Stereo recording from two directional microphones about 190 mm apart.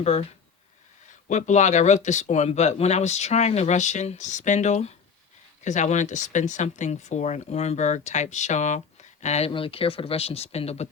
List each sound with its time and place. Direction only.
0.0 s speech: 35° left (ahead or behind)
1.3 s speech: 40° left (ahead or behind)